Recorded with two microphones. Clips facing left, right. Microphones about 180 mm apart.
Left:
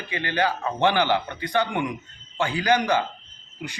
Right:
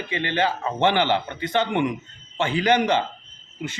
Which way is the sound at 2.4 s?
20° right (ahead or behind).